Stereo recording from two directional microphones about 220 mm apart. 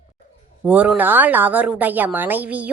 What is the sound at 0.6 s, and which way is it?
A woman's voice, 5° right (ahead or behind).